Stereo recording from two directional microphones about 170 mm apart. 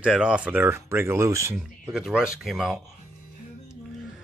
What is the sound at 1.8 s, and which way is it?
Speech, 5° right (ahead or behind).